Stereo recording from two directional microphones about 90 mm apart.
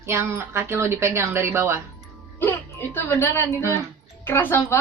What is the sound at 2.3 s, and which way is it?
A woman's voice, 25° left (ahead or behind).